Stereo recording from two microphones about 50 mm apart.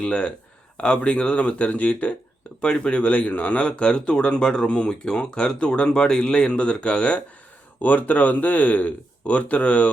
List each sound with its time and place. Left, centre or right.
0.0 s speech: left